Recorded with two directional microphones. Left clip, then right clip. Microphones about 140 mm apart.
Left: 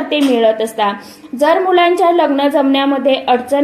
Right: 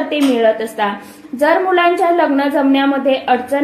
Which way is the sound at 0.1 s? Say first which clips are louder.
Left 2 dB; 40° left (ahead or behind).